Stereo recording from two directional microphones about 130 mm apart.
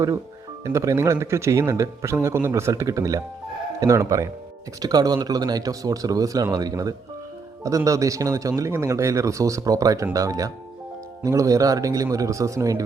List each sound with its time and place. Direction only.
0.6 s speech: 25° right (ahead or behind)